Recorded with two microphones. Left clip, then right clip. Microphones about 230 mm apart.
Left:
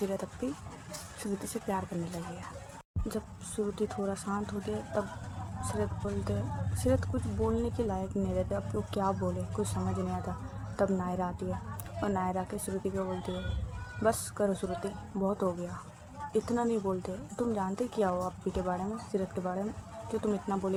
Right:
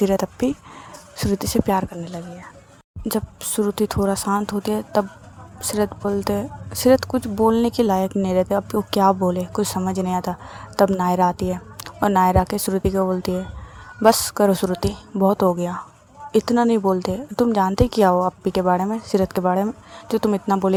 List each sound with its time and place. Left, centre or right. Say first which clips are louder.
0.0 s speech: right 15 dB; right
3.1 s speech: right 14 dB; right